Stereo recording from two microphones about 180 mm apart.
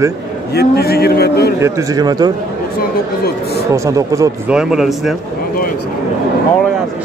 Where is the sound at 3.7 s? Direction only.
15° right (ahead or behind).